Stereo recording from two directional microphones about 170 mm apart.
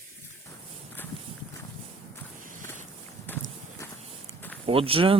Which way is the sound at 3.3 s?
10° left (ahead or behind).